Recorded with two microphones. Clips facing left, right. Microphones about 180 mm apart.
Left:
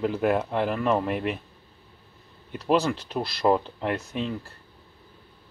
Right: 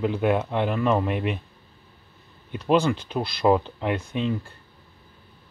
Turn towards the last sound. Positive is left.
turn(degrees=0)  # may be behind; listen again after turning